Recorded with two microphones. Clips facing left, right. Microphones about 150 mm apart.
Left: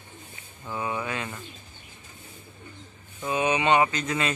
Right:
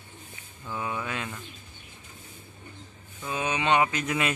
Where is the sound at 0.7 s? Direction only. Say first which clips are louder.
Left 2 dB; 5° left (ahead or behind).